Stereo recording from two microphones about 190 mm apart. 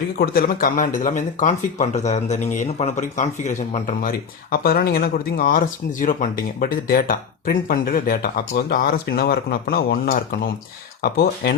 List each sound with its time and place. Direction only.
0.2 s speech: 50° left (ahead or behind)